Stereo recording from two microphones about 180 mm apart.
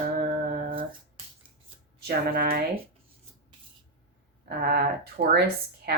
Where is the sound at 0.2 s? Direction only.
55° right (ahead or behind).